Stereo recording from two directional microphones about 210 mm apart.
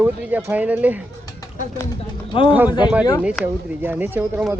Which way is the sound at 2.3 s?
25° left (ahead or behind).